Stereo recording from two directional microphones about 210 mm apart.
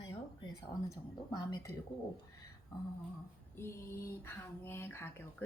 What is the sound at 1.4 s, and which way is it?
Speech, 20° left (ahead or behind).